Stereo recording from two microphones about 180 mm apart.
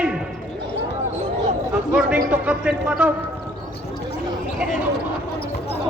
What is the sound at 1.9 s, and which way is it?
A man's voice, 5° right (ahead or behind).